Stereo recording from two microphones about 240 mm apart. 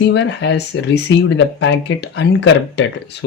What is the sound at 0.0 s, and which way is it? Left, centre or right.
Speech, left.